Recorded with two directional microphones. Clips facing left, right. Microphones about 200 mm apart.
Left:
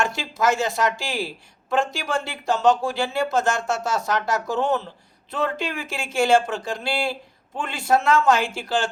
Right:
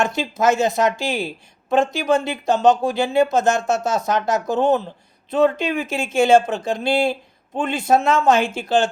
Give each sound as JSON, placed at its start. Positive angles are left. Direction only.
{"t": 0.0, "sound": "speech", "side_deg": -20}